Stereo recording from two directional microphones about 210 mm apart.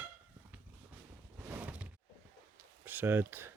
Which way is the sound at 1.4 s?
5° right (ahead or behind).